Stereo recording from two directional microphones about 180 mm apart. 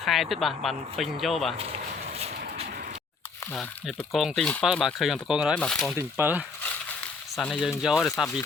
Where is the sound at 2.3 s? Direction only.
60° right (ahead or behind).